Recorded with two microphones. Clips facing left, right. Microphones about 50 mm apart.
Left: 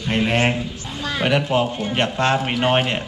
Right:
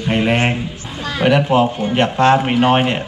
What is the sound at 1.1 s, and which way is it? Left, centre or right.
Speech, centre.